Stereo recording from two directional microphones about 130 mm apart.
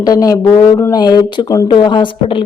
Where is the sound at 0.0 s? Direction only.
30° left (ahead or behind).